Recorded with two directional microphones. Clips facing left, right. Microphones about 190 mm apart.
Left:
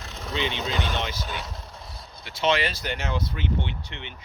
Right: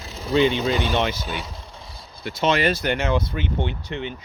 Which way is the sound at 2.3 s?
45° right (ahead or behind).